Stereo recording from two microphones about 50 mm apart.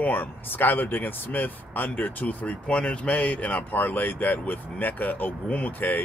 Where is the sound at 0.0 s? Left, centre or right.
Left.